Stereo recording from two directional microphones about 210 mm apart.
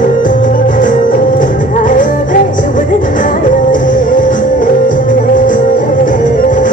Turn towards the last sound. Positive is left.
turn(degrees=40)  # may be behind; listen again after turning